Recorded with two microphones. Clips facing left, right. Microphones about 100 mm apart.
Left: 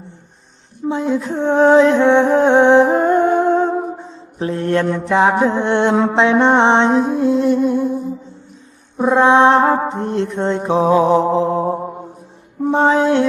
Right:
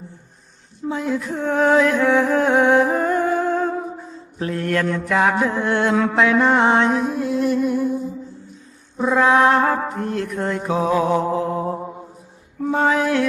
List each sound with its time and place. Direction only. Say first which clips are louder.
0.9 s music: left 4 dB; 25° left (ahead or behind)
3.9 s mantra: left 2 dB; 25° left (ahead or behind)
9.1 s mantra: left 4 dB; 25° left (ahead or behind)